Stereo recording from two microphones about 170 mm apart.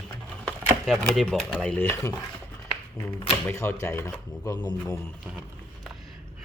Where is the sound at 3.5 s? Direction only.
15° left (ahead or behind).